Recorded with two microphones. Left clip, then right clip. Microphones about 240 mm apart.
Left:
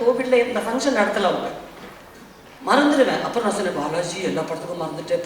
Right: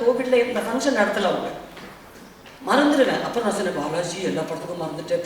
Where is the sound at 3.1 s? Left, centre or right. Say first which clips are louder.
Left 1 dB; centre.